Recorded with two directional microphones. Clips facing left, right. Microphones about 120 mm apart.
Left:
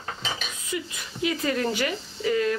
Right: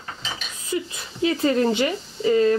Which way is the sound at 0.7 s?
30° right (ahead or behind).